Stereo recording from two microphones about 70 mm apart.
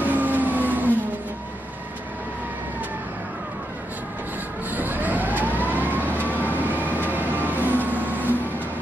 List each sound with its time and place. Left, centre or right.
0.0 s vehicle: right
4.6 s vehicle: right